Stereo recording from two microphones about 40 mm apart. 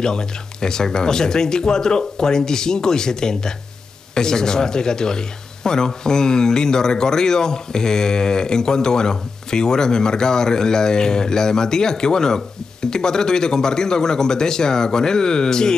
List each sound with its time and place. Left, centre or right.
0.0 s speech: centre